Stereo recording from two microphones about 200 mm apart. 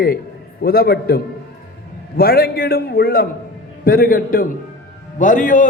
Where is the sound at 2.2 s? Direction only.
50° left (ahead or behind).